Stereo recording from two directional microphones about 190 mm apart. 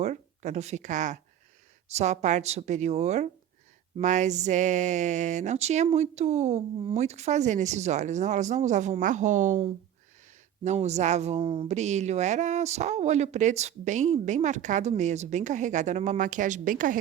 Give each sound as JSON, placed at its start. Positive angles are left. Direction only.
{"t": 0.0, "sound": "speech", "side_deg": -35}